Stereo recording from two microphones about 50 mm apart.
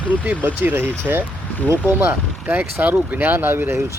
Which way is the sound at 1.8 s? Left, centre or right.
Right.